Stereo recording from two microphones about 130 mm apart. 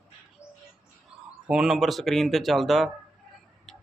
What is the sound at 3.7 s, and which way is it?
Tick-tock, centre (ahead or behind).